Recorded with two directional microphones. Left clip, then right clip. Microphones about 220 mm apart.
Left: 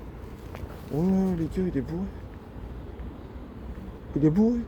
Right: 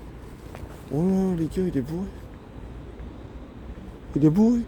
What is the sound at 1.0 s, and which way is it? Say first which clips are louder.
Hoot: right 2 dB; 55° right (ahead or behind).